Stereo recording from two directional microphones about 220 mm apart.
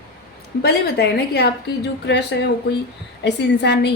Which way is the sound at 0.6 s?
45° left (ahead or behind).